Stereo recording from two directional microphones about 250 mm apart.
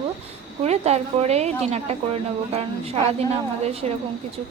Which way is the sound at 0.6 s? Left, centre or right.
Right.